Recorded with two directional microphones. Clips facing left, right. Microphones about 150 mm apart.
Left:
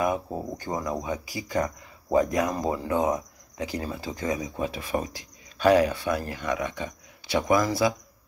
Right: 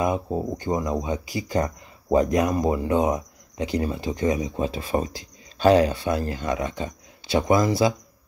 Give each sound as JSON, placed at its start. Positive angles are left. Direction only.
{"t": 0.0, "sound": "speech", "side_deg": -20}